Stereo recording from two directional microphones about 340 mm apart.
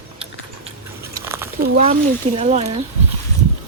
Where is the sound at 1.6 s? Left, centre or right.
Right.